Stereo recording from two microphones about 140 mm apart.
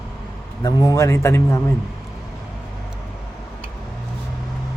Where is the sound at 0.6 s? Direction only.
25° left (ahead or behind).